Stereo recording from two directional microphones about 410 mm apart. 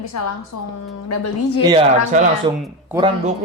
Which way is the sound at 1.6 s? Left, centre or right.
Centre.